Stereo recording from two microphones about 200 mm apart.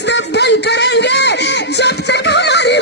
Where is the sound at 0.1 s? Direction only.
60° left (ahead or behind).